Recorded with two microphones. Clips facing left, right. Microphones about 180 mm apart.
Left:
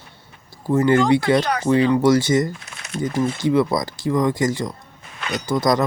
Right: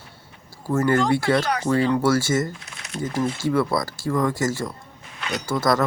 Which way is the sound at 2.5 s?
50° left (ahead or behind).